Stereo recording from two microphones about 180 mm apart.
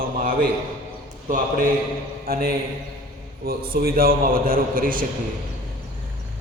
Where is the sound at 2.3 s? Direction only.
55° right (ahead or behind).